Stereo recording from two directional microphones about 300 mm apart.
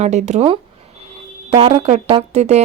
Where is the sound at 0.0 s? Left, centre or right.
Right.